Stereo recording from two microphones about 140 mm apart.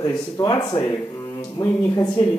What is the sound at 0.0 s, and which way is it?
A man's voice, 25° left (ahead or behind).